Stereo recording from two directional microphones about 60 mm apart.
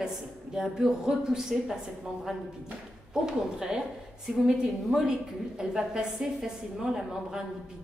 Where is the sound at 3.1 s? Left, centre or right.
Centre.